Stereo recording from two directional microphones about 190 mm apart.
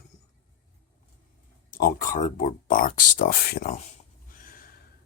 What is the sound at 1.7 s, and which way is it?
Speech, 50° left (ahead or behind).